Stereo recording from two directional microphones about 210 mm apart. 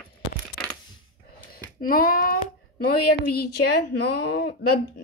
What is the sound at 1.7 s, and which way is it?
A child's voice, 45° left (ahead or behind).